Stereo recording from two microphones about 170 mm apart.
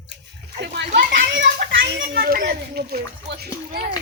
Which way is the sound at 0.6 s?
80° right.